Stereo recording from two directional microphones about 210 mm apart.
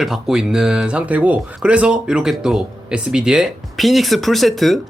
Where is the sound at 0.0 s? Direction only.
Centre (ahead or behind).